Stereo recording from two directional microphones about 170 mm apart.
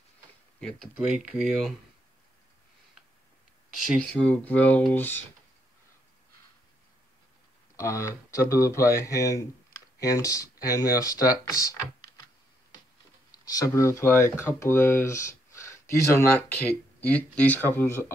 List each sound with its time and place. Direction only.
0.6 s speech: 5° left (ahead or behind)
4.0 s speech: 5° left (ahead or behind)
7.7 s speech: 20° left (ahead or behind)
13.6 s speech: 15° left (ahead or behind)